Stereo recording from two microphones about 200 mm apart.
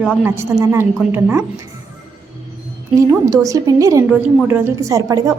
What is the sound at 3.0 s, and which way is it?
A woman's voice, 15° right (ahead or behind).